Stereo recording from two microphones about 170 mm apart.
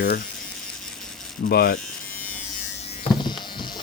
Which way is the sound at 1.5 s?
70° left (ahead or behind).